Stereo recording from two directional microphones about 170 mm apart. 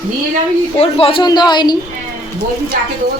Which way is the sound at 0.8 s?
35° left (ahead or behind).